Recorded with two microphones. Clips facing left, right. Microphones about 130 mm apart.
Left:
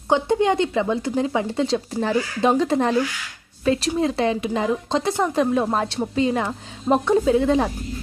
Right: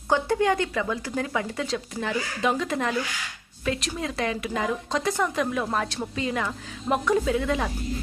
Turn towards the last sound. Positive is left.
turn(degrees=30)  # may be behind; listen again after turning